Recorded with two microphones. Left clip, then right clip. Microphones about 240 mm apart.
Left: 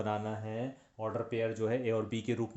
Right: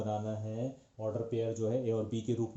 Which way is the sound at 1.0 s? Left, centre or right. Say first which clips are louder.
Left 1 dB; left.